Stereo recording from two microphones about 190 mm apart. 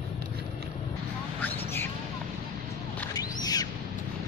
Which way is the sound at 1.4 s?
10° left (ahead or behind).